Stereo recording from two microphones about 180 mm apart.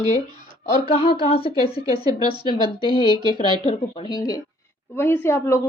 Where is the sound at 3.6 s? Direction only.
25° left (ahead or behind).